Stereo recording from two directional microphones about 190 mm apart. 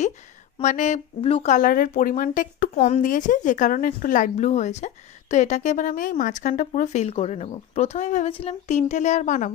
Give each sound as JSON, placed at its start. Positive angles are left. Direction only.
{"t": 0.6, "sound": "speech", "side_deg": 40}